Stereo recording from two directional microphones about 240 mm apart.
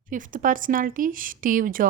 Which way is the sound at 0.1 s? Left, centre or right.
Right.